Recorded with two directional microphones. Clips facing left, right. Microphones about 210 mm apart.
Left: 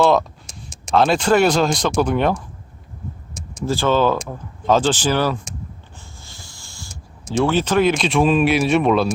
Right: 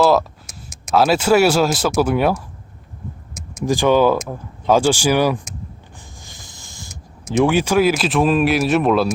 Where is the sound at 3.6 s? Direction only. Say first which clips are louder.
Right 3 dB; 15° right (ahead or behind).